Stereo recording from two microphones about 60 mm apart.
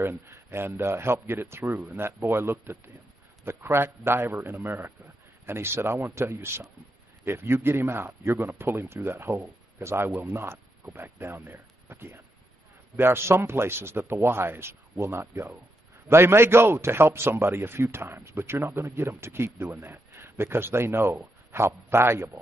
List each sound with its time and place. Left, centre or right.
0.0 s a man's voice: right